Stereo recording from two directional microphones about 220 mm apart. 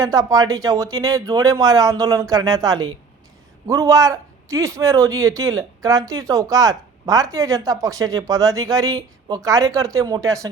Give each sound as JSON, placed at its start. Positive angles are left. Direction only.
{"t": 0.0, "sound": "a man's voice", "side_deg": -15}